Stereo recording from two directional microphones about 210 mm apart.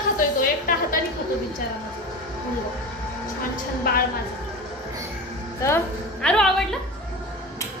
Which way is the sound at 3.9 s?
45° left (ahead or behind).